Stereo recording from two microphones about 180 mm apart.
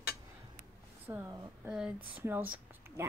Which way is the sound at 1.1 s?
10° right (ahead or behind).